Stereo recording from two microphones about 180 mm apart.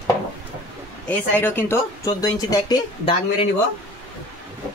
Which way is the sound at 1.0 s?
10° left (ahead or behind).